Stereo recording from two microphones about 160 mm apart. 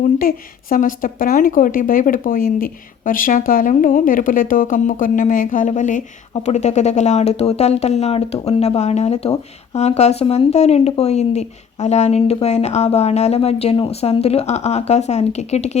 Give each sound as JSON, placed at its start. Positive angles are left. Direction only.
{"t": 0.2, "sound": "a woman's voice", "side_deg": 60}